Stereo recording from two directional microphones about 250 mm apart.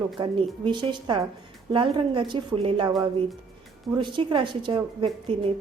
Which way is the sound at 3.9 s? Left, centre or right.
Centre.